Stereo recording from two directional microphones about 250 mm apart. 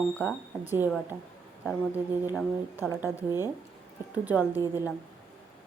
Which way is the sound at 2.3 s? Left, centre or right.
Centre.